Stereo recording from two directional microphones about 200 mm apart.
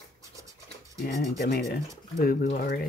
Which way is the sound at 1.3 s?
55° left (ahead or behind).